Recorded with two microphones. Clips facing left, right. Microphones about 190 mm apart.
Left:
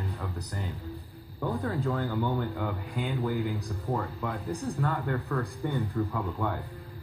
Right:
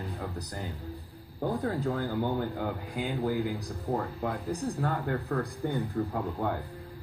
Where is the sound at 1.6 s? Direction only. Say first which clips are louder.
Even; 40° right (ahead or behind).